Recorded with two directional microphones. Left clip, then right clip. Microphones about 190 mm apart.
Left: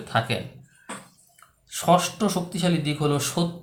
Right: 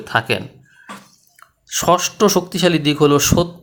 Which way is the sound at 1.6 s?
50° right (ahead or behind).